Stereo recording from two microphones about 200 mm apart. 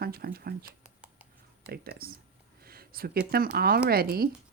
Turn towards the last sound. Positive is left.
turn(degrees=-50)  # may be behind; listen again after turning